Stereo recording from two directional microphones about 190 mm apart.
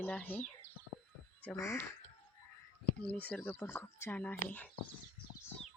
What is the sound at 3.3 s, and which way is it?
Speech, 5° left (ahead or behind).